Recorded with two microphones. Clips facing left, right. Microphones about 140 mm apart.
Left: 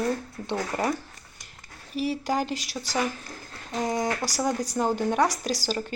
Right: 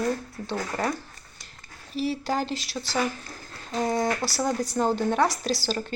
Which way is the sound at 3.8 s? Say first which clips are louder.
Right 2 dB; 15° left (ahead or behind).